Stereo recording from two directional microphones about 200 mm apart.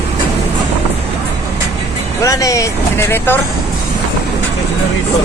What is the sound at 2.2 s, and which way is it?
Speech, 15° left (ahead or behind).